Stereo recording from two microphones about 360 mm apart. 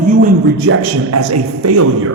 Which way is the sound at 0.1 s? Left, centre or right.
Right.